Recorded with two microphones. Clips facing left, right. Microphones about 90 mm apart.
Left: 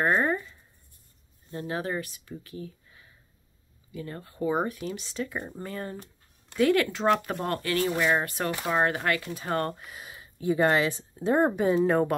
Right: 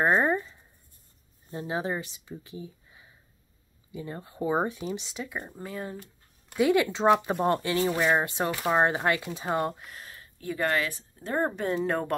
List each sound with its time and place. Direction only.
0.0 s writing: 20° right (ahead or behind)
1.5 s speech: 20° right (ahead or behind)
6.5 s speech: 15° right (ahead or behind)
9.8 s speech: 5° left (ahead or behind)